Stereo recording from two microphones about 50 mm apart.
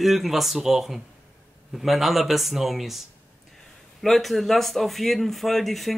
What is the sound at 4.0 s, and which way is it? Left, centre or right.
Speech, centre.